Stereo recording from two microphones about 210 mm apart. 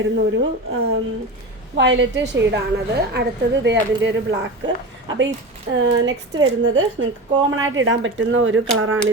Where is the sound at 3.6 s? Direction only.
55° right (ahead or behind).